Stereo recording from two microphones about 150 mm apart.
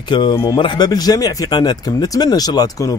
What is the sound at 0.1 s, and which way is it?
Speech, 30° left (ahead or behind).